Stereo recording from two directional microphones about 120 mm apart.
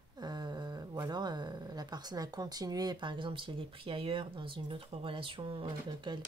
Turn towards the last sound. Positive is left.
turn(degrees=-35)  # may be behind; listen again after turning